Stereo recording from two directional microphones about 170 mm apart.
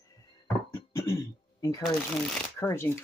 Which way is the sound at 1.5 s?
20° left (ahead or behind).